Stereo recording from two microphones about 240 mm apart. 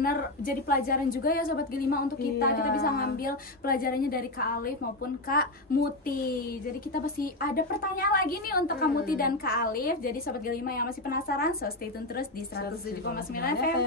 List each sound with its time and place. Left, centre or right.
0.0 s a woman's voice: left